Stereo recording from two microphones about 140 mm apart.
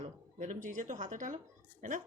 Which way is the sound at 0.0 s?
70° right (ahead or behind).